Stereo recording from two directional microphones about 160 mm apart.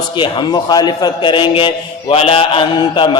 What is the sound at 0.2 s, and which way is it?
A man's voice, 25° left (ahead or behind).